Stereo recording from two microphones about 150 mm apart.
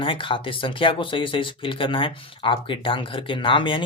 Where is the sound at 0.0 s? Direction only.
35° left (ahead or behind).